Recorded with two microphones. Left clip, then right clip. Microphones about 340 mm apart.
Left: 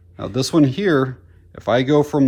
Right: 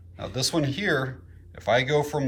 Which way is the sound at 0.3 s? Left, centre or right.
Centre.